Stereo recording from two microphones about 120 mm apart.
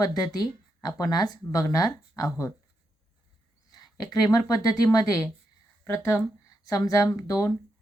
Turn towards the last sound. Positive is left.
turn(degrees=30)  # may be behind; listen again after turning